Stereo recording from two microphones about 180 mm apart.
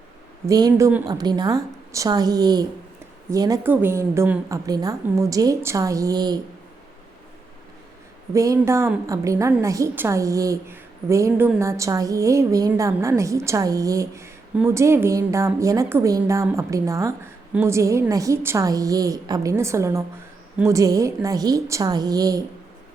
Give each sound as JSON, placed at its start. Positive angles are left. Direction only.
{"t": 0.4, "sound": "a woman's voice", "side_deg": -20}
{"t": 8.3, "sound": "a woman's voice", "side_deg": -15}